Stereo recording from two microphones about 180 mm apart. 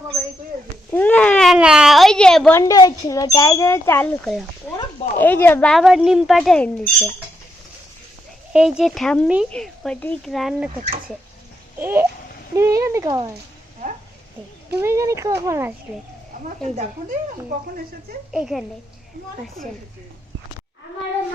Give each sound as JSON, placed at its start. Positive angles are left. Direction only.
{"t": 0.9, "sound": "baby cry", "side_deg": 10}
{"t": 2.6, "sound": "a woman's voice", "side_deg": 20}
{"t": 5.7, "sound": "speech", "side_deg": 0}
{"t": 8.5, "sound": "speech", "side_deg": -5}
{"t": 11.8, "sound": "speech", "side_deg": -15}
{"t": 14.8, "sound": "speech", "side_deg": -15}
{"t": 16.6, "sound": "speech", "side_deg": -40}
{"t": 18.3, "sound": "speech", "side_deg": -5}